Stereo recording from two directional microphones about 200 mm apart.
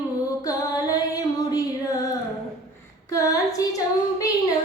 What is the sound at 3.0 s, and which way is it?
Child singing, 15° left (ahead or behind).